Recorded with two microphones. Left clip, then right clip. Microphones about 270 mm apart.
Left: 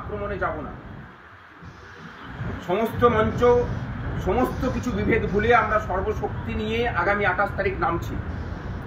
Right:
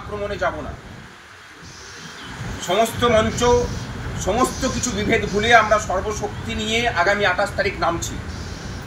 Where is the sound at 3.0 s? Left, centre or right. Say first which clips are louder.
Right 2 dB; centre.